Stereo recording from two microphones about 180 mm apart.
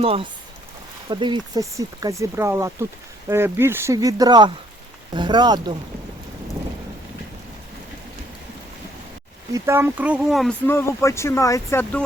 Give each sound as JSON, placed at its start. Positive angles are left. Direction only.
{"t": 0.0, "sound": "speech", "side_deg": -30}
{"t": 9.5, "sound": "speech", "side_deg": -15}
{"t": 10.7, "sound": "speech", "side_deg": 15}